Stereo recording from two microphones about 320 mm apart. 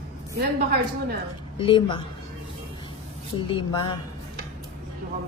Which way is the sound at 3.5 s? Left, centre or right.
Centre.